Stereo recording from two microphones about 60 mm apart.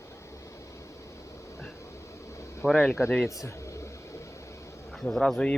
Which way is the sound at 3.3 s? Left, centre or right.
Left.